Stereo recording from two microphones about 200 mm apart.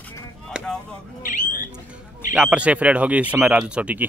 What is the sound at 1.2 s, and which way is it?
Bird, 40° left (ahead or behind).